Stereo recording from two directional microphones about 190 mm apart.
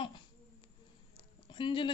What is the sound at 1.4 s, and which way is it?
Speech, 25° left (ahead or behind).